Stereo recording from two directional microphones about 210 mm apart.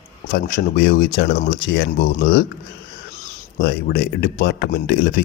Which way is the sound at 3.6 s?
50° left (ahead or behind).